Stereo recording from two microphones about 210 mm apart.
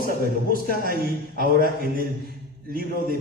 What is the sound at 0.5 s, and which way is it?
Speech, 45° right (ahead or behind).